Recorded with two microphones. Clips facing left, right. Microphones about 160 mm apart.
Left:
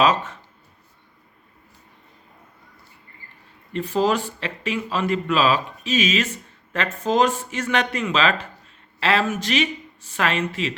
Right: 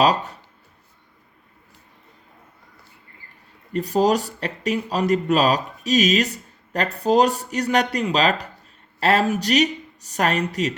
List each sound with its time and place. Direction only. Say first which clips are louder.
0.0 s a man's voice: right 1 dB; 35° right (ahead or behind)
3.7 s a man's voice: right 2 dB; 40° right (ahead or behind)